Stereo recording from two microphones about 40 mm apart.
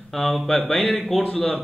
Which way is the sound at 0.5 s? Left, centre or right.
Centre.